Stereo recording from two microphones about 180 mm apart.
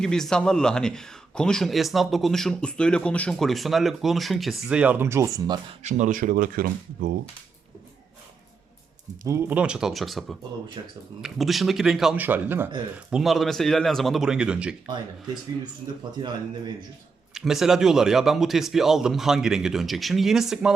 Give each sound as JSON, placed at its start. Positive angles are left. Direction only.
{"t": 0.0, "sound": "speech", "side_deg": 5}
{"t": 5.8, "sound": "speech", "side_deg": -40}
{"t": 9.2, "sound": "speech", "side_deg": -15}
{"t": 10.8, "sound": "speech", "side_deg": -25}
{"t": 11.2, "sound": "speech", "side_deg": 0}
{"t": 17.3, "sound": "speech", "side_deg": 0}